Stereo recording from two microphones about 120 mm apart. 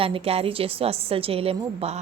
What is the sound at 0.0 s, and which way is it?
A woman's voice, 55° right (ahead or behind).